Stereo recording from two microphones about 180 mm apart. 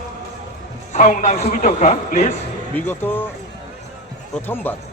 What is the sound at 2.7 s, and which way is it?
Speech, 10° left (ahead or behind).